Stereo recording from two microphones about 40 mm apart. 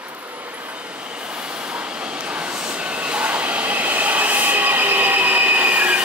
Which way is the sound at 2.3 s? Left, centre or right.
Right.